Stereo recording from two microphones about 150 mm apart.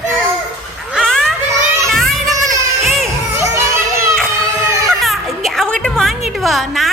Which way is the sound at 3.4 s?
20° right (ahead or behind).